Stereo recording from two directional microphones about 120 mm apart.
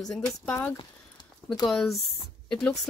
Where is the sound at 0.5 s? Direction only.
15° left (ahead or behind).